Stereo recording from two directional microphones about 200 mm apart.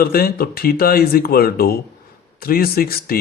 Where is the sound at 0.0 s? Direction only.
50° left (ahead or behind).